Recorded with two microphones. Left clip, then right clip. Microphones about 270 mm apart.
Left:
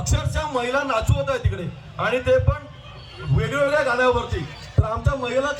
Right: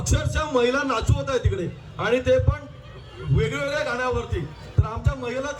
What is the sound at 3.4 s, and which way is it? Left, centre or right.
A man's voice, centre.